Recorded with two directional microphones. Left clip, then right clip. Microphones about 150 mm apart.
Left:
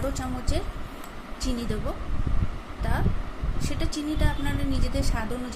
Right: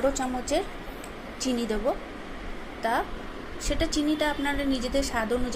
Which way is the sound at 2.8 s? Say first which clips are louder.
Right 6 dB; 15° right (ahead or behind).